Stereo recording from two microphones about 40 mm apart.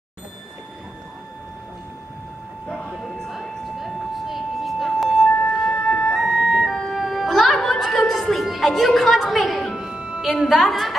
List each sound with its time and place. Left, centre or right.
3.3 s vehicle: centre
5.0 s music: centre
6.7 s music: centre
9.8 s music: centre
10.2 s a woman's voice: centre